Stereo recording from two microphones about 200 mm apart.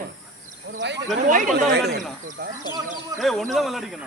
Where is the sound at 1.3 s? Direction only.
40° right (ahead or behind).